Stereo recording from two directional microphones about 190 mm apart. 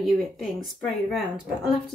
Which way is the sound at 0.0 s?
Centre (ahead or behind).